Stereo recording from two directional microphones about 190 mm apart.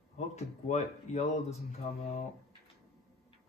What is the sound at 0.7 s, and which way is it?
Speech, 35° left (ahead or behind).